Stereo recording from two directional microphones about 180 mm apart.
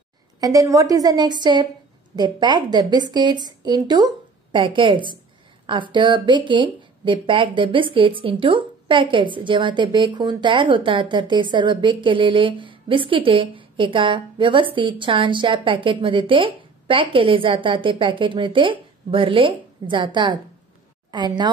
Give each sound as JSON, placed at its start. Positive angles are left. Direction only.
{"t": 0.4, "sound": "a woman's voice", "side_deg": -20}